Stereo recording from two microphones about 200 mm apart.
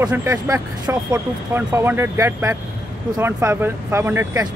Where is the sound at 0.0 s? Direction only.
10° right (ahead or behind).